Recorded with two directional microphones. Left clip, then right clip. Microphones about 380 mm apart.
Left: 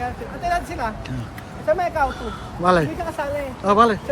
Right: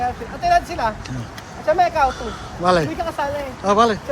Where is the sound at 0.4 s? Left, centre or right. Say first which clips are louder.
Right 6 dB; centre.